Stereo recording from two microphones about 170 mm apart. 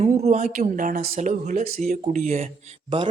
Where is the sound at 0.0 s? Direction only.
40° right (ahead or behind).